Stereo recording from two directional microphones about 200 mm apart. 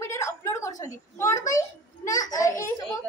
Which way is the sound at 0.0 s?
15° left (ahead or behind).